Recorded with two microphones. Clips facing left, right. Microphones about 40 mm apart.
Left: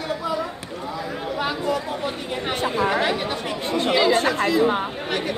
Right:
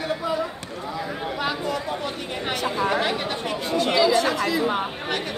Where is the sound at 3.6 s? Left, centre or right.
Left.